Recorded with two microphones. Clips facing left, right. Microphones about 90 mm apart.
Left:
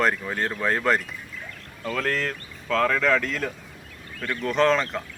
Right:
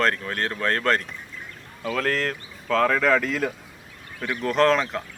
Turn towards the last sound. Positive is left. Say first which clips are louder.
# right 1 dB
turn(degrees=0)  # may be behind; listen again after turning